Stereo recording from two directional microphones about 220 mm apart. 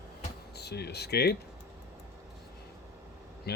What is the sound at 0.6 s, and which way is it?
Speech, 50° left (ahead or behind).